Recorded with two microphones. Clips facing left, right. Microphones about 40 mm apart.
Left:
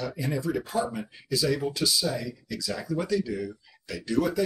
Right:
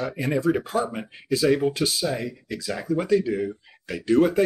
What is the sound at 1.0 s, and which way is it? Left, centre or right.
Speech, right.